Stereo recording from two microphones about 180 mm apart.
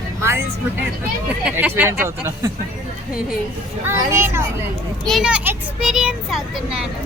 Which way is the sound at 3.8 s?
10° right (ahead or behind).